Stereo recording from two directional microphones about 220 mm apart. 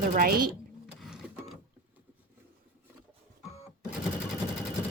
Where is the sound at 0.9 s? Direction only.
Centre (ahead or behind).